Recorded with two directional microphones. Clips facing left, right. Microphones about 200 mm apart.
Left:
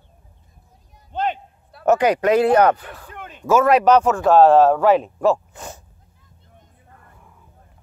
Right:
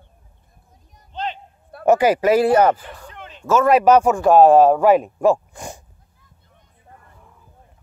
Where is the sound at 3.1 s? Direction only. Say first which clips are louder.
Left 2 dB; 50° left (ahead or behind).